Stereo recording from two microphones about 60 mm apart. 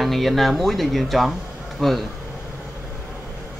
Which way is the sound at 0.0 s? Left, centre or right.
Centre.